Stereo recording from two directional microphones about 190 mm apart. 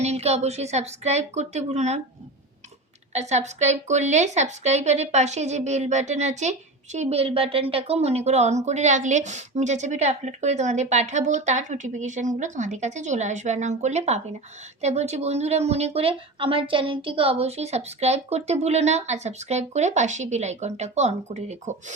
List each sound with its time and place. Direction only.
0.0 s speech: 35° right (ahead or behind)
3.1 s speech: 35° right (ahead or behind)